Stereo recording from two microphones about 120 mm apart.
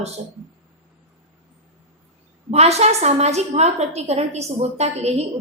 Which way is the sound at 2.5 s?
60° right (ahead or behind).